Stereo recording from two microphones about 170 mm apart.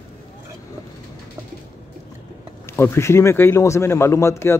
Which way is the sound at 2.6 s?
15° left (ahead or behind).